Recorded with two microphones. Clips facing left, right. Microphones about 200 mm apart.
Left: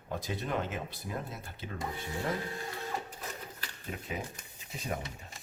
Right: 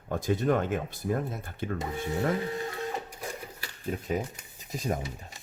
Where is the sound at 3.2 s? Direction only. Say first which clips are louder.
Right 5 dB; 10° right (ahead or behind).